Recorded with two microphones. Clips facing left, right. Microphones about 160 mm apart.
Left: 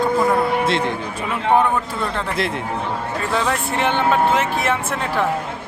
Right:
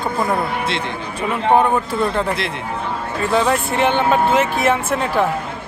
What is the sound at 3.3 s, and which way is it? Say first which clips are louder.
Speech: right 5 dB; 5° right (ahead or behind).